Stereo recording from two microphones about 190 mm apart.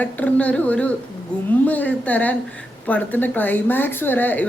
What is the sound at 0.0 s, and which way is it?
Speech, 10° left (ahead or behind).